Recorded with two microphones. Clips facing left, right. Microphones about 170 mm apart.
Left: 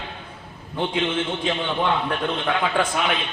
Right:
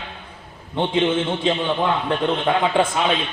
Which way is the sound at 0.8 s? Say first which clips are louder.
Right 3 dB; 25° right (ahead or behind).